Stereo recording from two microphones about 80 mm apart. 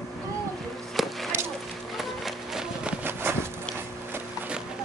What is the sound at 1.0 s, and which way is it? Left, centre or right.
Chop, centre.